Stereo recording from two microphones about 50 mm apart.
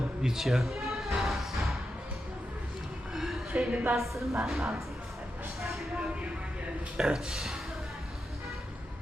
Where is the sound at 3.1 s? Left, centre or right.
Centre.